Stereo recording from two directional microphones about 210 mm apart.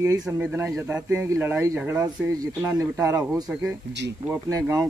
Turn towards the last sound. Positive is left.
turn(degrees=-15)  # may be behind; listen again after turning